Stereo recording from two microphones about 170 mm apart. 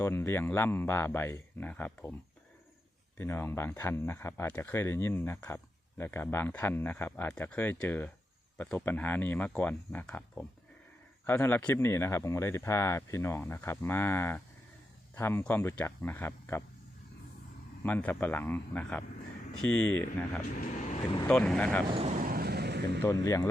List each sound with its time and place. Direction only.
0.0 s speech: 15° left (ahead or behind)
3.2 s speech: 15° left (ahead or behind)
17.8 s speech: 10° left (ahead or behind)
20.6 s vehicle: 45° left (ahead or behind)
21.2 s speech: 5° left (ahead or behind)
21.8 s speech: 35° right (ahead or behind)
22.2 s vehicle: 60° right (ahead or behind)
23.0 s speech: 20° left (ahead or behind)